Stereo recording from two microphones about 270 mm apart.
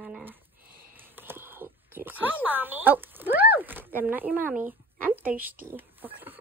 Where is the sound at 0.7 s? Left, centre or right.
Right.